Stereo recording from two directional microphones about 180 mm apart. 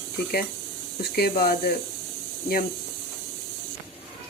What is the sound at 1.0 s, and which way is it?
Speech, 60° left (ahead or behind).